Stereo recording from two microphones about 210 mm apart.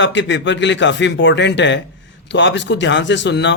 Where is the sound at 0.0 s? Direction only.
60° left (ahead or behind).